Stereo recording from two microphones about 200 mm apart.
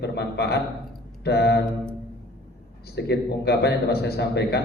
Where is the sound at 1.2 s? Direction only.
55° left (ahead or behind).